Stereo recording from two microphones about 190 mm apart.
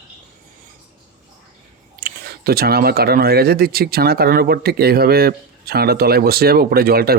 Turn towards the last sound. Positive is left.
turn(degrees=-55)  # may be behind; listen again after turning